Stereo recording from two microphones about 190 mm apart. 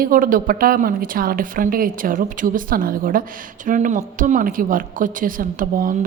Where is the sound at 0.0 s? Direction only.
45° right (ahead or behind).